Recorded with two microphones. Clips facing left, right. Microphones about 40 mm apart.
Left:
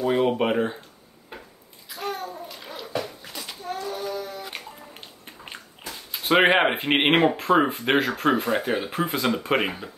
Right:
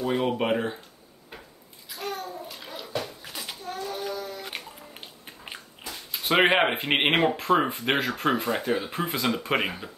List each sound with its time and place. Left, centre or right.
0.0 s a sound: centre
1.9 s babbling: centre
2.4 s bathtub: centre
3.8 s child singing: centre
4.5 s music: centre
6.1 s speech: centre
8.6 s speech: left
8.9 s speech: centre